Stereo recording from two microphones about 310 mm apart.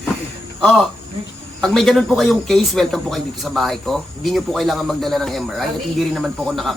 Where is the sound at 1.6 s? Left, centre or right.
Centre.